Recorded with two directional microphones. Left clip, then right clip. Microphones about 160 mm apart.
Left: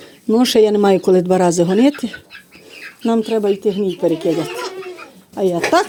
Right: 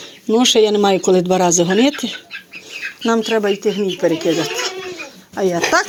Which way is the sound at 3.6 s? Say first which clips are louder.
Even; 15° left (ahead or behind).